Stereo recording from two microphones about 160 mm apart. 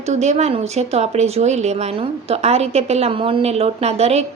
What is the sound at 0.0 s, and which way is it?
A woman's voice, 45° right (ahead or behind).